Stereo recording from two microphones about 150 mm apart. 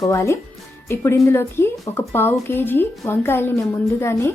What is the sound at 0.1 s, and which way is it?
Speech, 20° left (ahead or behind).